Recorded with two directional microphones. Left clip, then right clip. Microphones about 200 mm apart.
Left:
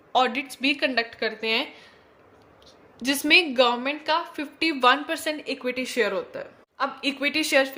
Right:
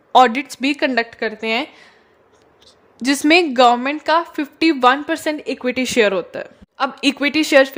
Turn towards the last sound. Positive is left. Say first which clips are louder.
# right 8 dB
turn(degrees=-45)  # may be behind; listen again after turning